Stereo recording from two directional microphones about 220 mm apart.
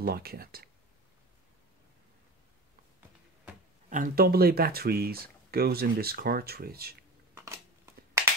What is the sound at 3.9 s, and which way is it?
Speech, 40° right (ahead or behind).